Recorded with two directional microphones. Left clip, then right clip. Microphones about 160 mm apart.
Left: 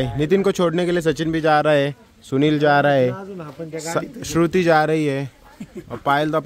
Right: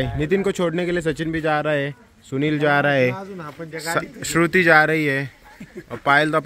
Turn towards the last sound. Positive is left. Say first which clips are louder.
# right 2 dB
turn(degrees=5)  # may be behind; listen again after turning